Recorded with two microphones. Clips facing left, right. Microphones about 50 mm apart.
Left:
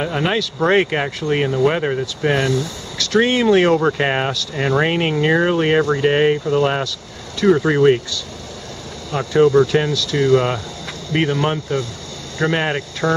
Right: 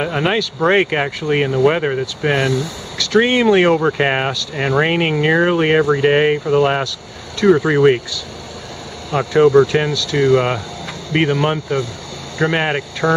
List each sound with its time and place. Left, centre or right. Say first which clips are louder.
0.0 s speech: right 2 dB; centre